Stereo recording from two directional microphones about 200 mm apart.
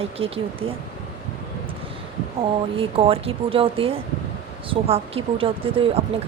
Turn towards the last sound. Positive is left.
turn(degrees=-25)  # may be behind; listen again after turning